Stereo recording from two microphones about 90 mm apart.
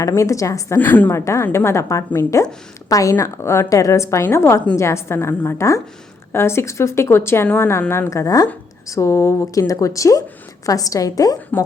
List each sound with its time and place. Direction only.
0.0 s a woman's voice: 35° left (ahead or behind)
0.8 s a woman's voice: 20° left (ahead or behind)
1.1 s a woman's voice: 30° left (ahead or behind)